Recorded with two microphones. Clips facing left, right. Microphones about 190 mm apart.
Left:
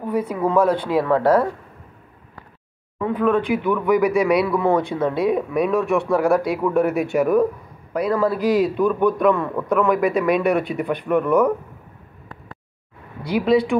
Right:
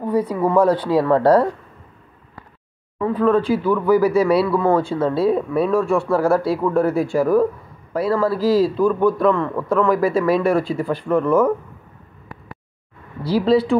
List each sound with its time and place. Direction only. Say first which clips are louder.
0.1 s speech: right 2 dB; 10° left (ahead or behind)
1.0 s speech: right 3 dB; 15° right (ahead or behind)
3.1 s speech: right 2 dB; 15° left (ahead or behind)
13.2 s speech: right 1 dB; 15° left (ahead or behind)